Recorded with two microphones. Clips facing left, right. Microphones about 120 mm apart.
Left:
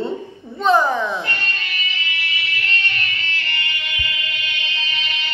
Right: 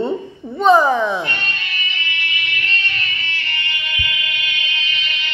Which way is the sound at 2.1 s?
35° left (ahead or behind).